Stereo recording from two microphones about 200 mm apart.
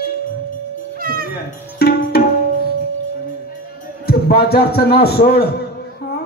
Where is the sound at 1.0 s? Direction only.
45° right (ahead or behind).